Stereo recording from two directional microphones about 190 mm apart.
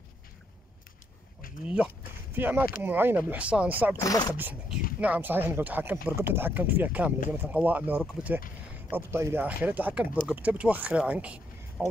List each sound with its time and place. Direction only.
2.3 s speech: 10° right (ahead or behind)
4.0 s speech: 20° left (ahead or behind)
4.3 s speech: 10° right (ahead or behind)